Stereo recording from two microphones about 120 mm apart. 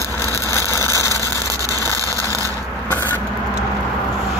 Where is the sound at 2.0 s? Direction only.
25° right (ahead or behind).